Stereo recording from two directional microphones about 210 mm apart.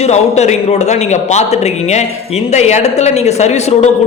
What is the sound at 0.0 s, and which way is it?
A man's voice, 30° left (ahead or behind).